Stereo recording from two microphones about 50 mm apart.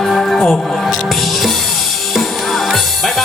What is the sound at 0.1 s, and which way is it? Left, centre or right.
Music, centre.